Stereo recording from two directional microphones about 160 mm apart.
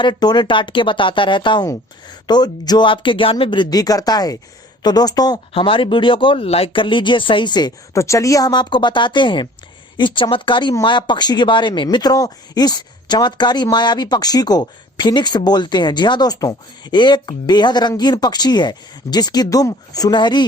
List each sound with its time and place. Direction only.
0.0 s speech: 25° left (ahead or behind)